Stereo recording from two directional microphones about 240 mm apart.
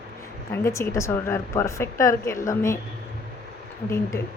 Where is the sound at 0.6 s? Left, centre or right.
Centre.